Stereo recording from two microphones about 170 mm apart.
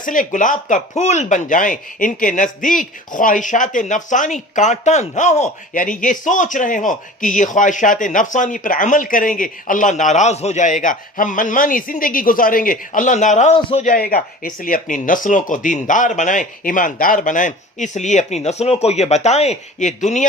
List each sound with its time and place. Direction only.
0.0 s speech: 50° left (ahead or behind)
13.8 s speech: 60° left (ahead or behind)